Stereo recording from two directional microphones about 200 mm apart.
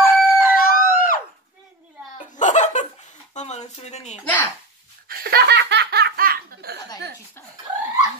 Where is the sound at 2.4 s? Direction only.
40° left (ahead or behind).